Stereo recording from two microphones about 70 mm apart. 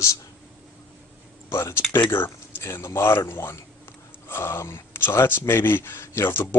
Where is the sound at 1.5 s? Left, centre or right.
Left.